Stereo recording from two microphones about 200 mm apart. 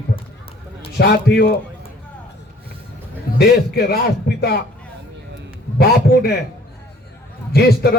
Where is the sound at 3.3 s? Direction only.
50° left (ahead or behind).